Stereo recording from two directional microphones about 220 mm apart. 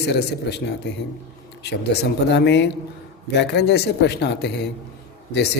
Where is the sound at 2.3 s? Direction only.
50° left (ahead or behind).